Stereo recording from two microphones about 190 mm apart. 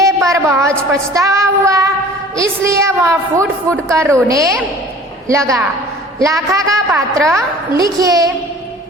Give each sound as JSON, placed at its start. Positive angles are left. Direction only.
{"t": 0.0, "sound": "a woman's voice", "side_deg": -15}